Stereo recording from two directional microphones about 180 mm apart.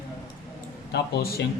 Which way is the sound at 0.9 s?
60° left (ahead or behind).